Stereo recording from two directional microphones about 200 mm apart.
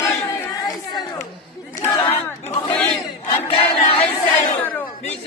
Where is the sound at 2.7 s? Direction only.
5° left (ahead or behind).